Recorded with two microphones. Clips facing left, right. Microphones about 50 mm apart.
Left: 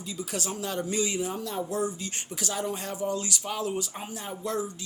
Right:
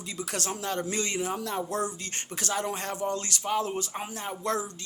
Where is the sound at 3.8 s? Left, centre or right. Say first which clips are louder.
Right 1 dB; right.